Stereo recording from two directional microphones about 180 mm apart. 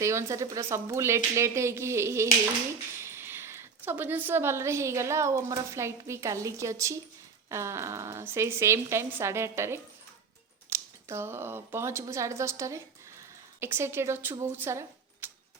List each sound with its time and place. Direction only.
0.0 s a woman's voice: 15° right (ahead or behind)